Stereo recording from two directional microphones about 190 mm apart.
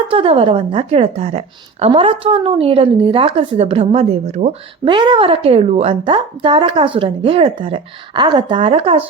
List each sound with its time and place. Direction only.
0.1 s a woman's voice: 30° right (ahead or behind)
4.9 s a woman's voice: 25° right (ahead or behind)